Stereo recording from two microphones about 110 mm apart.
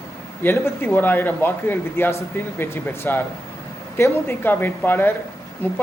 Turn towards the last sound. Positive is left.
turn(degrees=15)  # may be behind; listen again after turning